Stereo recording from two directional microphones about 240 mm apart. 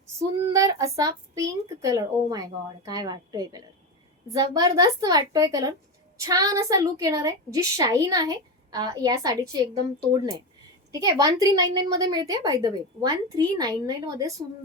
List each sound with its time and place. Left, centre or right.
0.5 s a woman's voice: centre
10.9 s a woman's voice: centre